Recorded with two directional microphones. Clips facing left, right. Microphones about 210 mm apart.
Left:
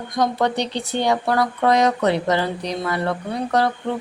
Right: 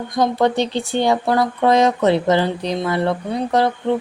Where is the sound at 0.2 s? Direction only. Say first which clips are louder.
Right 3 dB; 30° right (ahead or behind).